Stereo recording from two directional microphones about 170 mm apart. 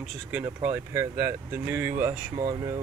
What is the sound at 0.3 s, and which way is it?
Speech, 10° right (ahead or behind).